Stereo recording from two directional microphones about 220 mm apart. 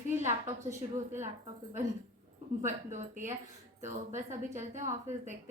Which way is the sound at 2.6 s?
35° right (ahead or behind).